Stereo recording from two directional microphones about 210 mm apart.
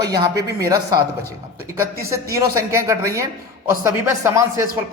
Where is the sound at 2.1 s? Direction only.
15° right (ahead or behind).